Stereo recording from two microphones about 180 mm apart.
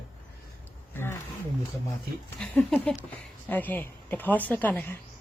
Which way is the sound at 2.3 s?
5° left (ahead or behind).